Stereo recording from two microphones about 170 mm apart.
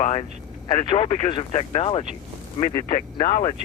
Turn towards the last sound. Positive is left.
turn(degrees=30)  # may be behind; listen again after turning